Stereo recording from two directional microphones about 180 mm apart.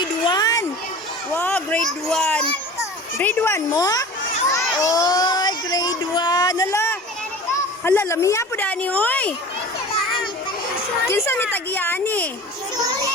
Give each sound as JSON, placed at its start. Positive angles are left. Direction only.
{"t": 0.3, "sound": "a sound", "side_deg": 20}
{"t": 1.3, "sound": "a woman's voice", "side_deg": 10}
{"t": 4.4, "sound": "child singing", "side_deg": 20}
{"t": 7.9, "sound": "a woman's voice", "side_deg": 15}
{"t": 11.5, "sound": "a woman's voice", "side_deg": 10}
{"t": 12.7, "sound": "a child's voice", "side_deg": -20}